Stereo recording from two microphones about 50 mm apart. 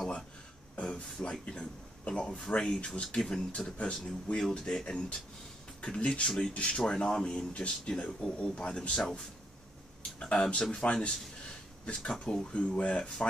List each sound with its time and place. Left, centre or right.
0.7 s speech: left
7.9 s speech: centre
8.6 s speech: left
10.2 s speech: centre